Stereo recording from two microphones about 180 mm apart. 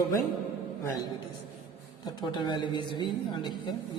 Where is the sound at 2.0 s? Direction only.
25° left (ahead or behind).